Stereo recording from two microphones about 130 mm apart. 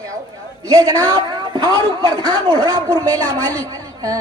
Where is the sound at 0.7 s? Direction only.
25° right (ahead or behind).